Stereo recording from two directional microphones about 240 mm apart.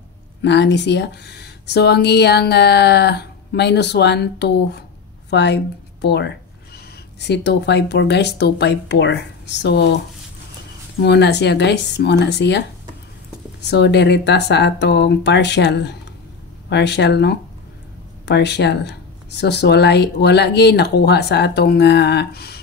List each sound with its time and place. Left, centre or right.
0.4 s speech: left
11.0 s speech: left